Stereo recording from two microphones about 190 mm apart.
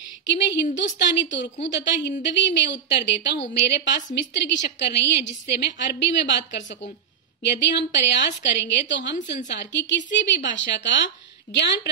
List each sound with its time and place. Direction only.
0.3 s a woman's voice: 65° left (ahead or behind)